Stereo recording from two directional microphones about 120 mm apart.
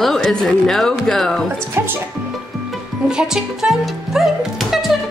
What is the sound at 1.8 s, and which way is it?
Speech, 20° right (ahead or behind).